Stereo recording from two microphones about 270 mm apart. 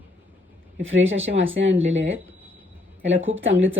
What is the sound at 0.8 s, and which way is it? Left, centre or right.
Speech, right.